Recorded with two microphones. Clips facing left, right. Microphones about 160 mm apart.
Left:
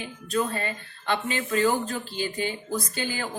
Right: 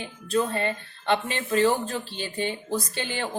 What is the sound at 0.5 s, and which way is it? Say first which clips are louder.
Speech: right 4 dB; 25° right (ahead or behind).